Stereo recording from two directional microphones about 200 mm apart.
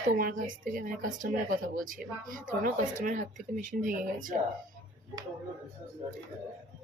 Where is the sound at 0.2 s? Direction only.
45° right (ahead or behind).